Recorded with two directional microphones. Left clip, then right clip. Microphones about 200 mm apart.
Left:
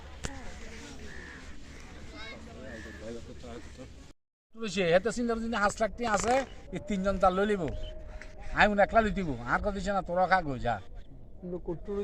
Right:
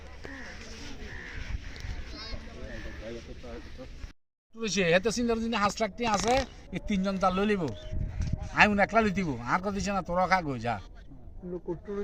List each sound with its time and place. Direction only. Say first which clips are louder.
4.6 s speech: right 1 dB; 60° right (ahead or behind)
8.5 s a man's voice: right 1 dB; 60° right (ahead or behind)